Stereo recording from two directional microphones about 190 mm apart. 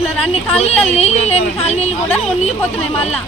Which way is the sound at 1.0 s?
35° left (ahead or behind).